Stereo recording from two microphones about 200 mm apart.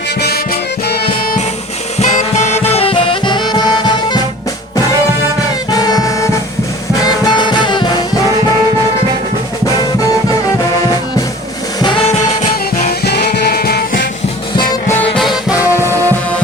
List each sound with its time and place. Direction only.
2.0 s music: 35° left (ahead or behind)
5.7 s music: 20° left (ahead or behind)
7.3 s music: 20° left (ahead or behind)
12.1 s music: 30° left (ahead or behind)
13.1 s music: 50° left (ahead or behind)
14.5 s music: 10° left (ahead or behind)
15.1 s music: centre (ahead or behind)